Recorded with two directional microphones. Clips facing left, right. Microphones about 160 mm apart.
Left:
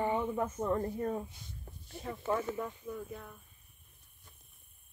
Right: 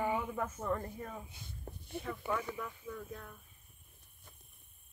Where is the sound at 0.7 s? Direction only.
25° left (ahead or behind).